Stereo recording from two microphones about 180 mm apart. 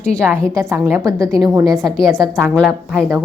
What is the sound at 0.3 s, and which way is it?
A woman's voice, 15° right (ahead or behind).